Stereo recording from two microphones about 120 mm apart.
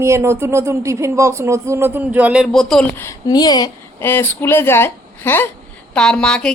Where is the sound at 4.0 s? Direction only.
20° left (ahead or behind).